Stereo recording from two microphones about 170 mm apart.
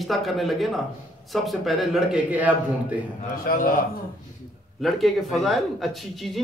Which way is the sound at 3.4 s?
55° left (ahead or behind).